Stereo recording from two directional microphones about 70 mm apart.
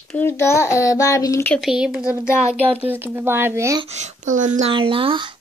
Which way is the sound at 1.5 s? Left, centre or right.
Centre.